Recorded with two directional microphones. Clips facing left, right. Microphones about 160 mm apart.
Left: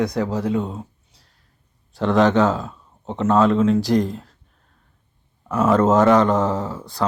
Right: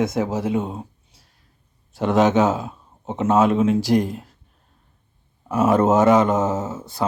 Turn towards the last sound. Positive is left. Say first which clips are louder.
# even
turn(degrees=-20)  # may be behind; listen again after turning